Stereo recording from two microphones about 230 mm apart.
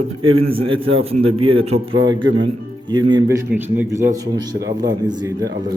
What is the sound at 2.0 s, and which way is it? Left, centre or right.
Speech, right.